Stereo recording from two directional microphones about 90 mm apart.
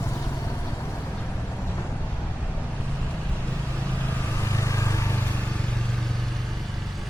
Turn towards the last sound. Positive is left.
turn(degrees=35)  # may be behind; listen again after turning